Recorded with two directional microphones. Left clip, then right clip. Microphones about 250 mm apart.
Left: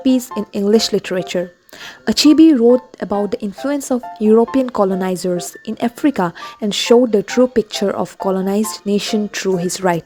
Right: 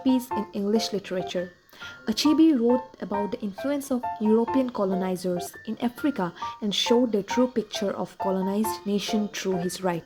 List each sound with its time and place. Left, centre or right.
0.0 s speech: left